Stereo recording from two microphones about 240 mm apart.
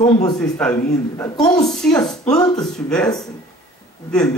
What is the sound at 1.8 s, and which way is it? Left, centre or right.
Speech, centre.